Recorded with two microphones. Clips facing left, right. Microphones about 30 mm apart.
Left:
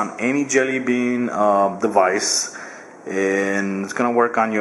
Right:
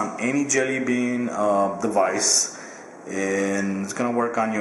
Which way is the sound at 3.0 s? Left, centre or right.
Centre.